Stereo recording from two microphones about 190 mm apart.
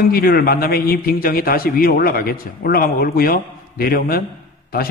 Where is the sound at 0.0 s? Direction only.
50° left (ahead or behind).